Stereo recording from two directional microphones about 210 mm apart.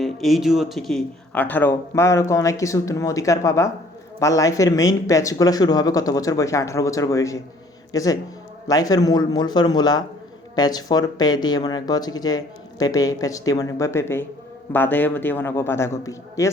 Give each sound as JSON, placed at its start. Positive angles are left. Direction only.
{"t": 0.0, "sound": "speech", "side_deg": 0}